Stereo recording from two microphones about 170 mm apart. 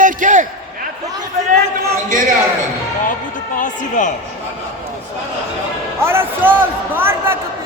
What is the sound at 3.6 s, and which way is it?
Speech, 50° left (ahead or behind).